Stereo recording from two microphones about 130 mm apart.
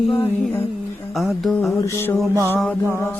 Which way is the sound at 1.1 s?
Centre (ahead or behind).